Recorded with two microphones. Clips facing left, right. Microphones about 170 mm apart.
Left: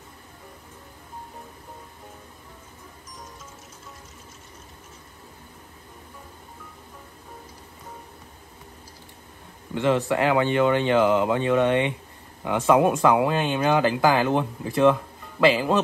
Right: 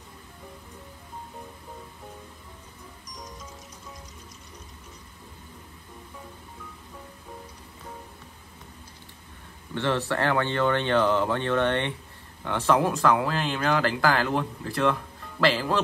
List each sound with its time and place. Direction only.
9.8 s speech: 15° left (ahead or behind)